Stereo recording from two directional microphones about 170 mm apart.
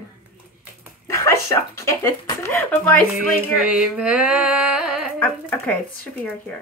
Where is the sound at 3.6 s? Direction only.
5° right (ahead or behind).